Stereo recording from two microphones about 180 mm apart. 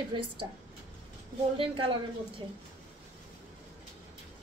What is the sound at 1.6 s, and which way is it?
Speech, 30° right (ahead or behind).